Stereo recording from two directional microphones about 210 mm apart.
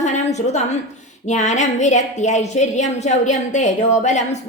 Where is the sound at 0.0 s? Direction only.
35° left (ahead or behind).